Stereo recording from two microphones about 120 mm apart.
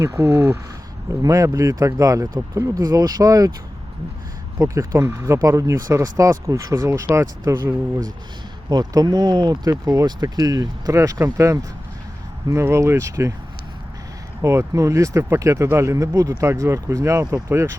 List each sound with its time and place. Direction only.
0.0 s speech: 25° right (ahead or behind)
4.6 s speech: 25° right (ahead or behind)
8.7 s speech: 35° right (ahead or behind)
14.4 s speech: 25° right (ahead or behind)